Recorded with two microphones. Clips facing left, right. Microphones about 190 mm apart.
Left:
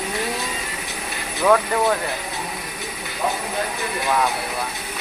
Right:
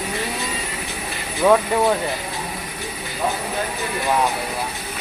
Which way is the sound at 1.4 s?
25° right (ahead or behind).